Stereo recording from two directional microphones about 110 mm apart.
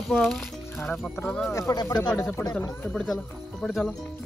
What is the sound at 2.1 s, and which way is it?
Speech, 20° left (ahead or behind).